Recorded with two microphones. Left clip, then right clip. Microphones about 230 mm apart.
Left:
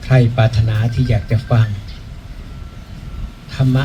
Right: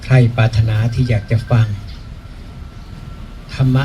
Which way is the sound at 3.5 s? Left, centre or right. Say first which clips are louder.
Even; right.